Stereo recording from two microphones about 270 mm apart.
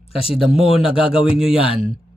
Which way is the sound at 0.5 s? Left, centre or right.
Left.